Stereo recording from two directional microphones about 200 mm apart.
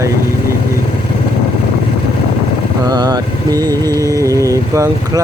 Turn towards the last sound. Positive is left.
turn(degrees=-15)  # may be behind; listen again after turning